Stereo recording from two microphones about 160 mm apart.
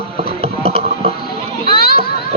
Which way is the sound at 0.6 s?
35° right (ahead or behind).